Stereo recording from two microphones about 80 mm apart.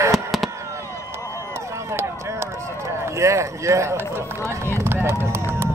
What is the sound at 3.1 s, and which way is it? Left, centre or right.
Speech, right.